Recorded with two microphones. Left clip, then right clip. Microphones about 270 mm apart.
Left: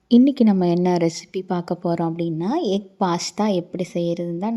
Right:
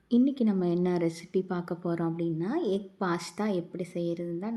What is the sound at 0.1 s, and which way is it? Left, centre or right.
A woman's voice, left.